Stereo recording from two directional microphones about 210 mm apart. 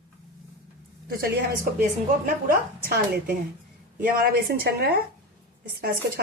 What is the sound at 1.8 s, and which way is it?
A woman's voice, 40° right (ahead or behind).